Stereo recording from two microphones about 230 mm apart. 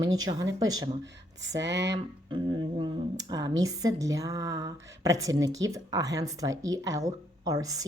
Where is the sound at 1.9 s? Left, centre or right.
Right.